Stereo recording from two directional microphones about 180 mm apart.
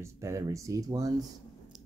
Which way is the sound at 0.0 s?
15° right (ahead or behind).